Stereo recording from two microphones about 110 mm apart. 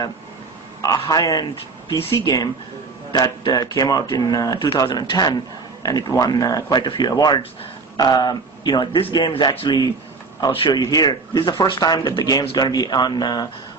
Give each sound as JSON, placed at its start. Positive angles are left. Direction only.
{"t": 0.8, "sound": "a man's voice", "side_deg": 35}